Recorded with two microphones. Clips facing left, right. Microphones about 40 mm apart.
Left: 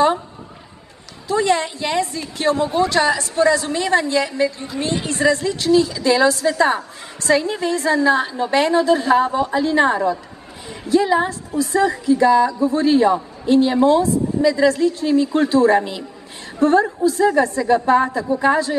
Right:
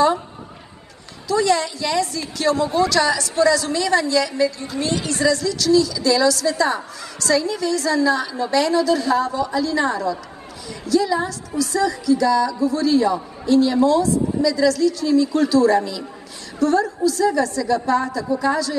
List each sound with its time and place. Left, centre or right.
1.2 s a woman's voice: left